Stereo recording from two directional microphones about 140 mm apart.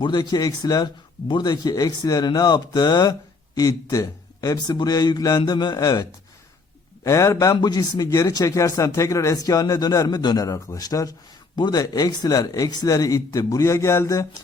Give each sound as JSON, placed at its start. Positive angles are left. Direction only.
{"t": 0.0, "sound": "speech", "side_deg": 30}